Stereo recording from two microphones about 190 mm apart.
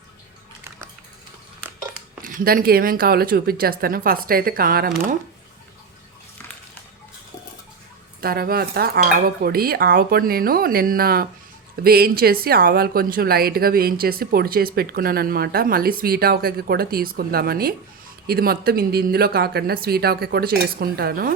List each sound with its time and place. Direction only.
1.9 s speech: 45° right (ahead or behind)
8.2 s speech: 50° right (ahead or behind)